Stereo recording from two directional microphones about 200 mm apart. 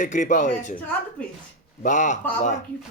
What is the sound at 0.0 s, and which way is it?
Speech, 40° left (ahead or behind).